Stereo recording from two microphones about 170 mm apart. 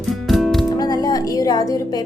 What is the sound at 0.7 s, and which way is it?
Music, 25° left (ahead or behind).